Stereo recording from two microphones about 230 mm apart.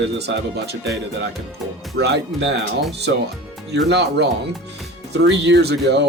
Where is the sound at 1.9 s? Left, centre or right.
Right.